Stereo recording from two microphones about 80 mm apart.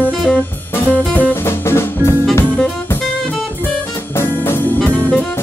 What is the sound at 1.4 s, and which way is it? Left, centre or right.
Music, left.